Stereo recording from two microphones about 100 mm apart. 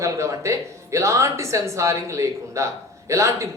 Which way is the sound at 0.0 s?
30° right (ahead or behind).